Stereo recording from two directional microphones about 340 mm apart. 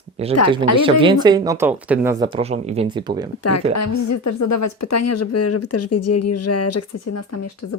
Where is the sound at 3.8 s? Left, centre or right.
Left.